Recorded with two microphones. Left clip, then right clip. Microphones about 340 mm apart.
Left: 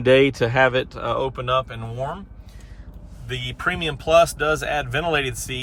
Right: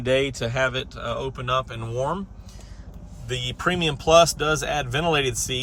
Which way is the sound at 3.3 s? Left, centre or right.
Centre.